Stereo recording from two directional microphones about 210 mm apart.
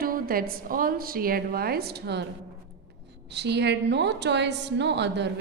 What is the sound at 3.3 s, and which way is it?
A woman's voice, 55° right (ahead or behind).